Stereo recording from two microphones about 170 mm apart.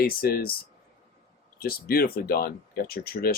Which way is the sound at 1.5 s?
60° left (ahead or behind).